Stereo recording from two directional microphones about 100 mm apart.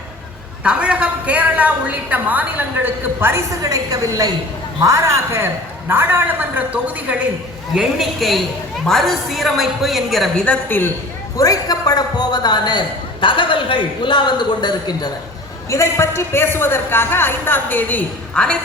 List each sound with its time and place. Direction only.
0.6 s a woman's voice: 10° right (ahead or behind)
3.6 s a woman's voice: 35° right (ahead or behind); by 7.2 s 15° right (ahead or behind)
7.8 s a woman's voice: centre (ahead or behind)
10.4 s a woman's voice: 15° left (ahead or behind)
11.3 s a man's voice: 35° left (ahead or behind)
15.7 s a woman's voice: 30° left (ahead or behind); by 18.5 s 10° left (ahead or behind)